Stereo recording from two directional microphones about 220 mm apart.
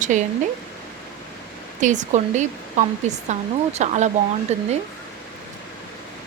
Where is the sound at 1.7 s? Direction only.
35° right (ahead or behind).